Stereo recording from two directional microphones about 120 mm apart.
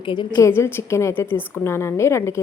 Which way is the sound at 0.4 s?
20° left (ahead or behind).